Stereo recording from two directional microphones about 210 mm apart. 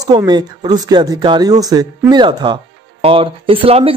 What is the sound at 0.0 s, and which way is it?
Speech, 20° right (ahead or behind).